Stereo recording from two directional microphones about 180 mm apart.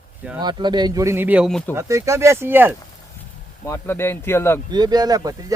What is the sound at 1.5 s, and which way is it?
Speech, 5° left (ahead or behind).